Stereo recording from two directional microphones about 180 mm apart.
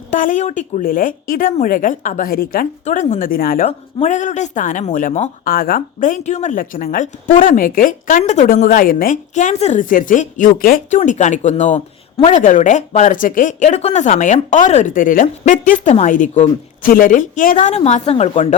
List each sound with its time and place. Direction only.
0.1 s a woman's voice: 45° left (ahead or behind)
2.8 s a woman's voice: 40° left (ahead or behind)
3.7 s a woman's voice: 35° left (ahead or behind)